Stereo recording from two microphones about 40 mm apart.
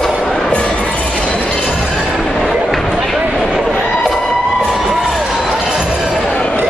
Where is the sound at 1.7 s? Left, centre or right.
Centre.